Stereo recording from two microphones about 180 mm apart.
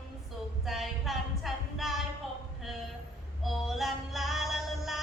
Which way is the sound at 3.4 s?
Centre (ahead or behind).